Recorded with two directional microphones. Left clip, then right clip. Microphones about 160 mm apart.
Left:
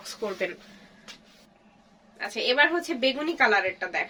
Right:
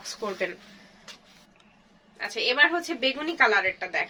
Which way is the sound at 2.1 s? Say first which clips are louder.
Right 1 dB; 15° left (ahead or behind).